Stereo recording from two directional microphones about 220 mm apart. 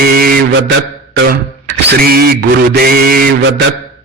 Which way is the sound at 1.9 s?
45° right (ahead or behind).